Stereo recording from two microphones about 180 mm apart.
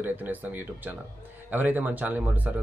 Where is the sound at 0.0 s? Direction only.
10° right (ahead or behind).